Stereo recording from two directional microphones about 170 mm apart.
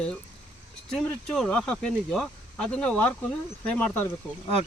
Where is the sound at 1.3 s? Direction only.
5° left (ahead or behind).